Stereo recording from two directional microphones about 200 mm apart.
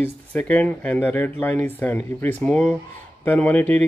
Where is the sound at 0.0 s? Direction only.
5° left (ahead or behind).